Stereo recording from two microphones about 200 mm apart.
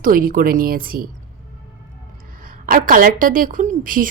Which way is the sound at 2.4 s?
45° right (ahead or behind).